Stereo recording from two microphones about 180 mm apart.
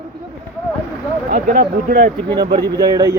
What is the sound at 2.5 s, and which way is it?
Speech, 20° right (ahead or behind).